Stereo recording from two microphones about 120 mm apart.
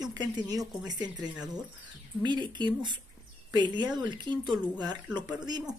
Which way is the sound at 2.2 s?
40° right (ahead or behind).